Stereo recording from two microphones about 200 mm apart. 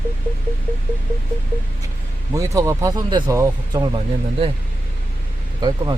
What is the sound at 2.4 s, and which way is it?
Speech, 15° right (ahead or behind).